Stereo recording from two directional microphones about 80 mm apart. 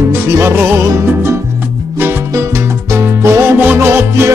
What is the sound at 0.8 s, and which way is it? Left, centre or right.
Music, right.